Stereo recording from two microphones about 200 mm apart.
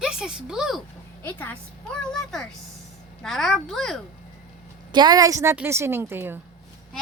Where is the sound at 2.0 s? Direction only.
5° left (ahead or behind).